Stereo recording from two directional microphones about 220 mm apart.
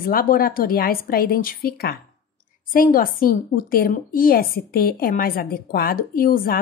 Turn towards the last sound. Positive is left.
turn(degrees=40)  # may be behind; listen again after turning